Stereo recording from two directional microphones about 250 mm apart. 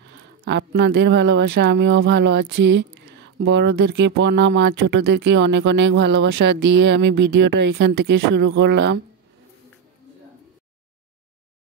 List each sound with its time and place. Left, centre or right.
0.1 s speech: right